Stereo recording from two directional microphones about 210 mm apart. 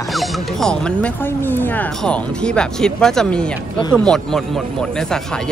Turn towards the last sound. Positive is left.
turn(degrees=5)  # may be behind; listen again after turning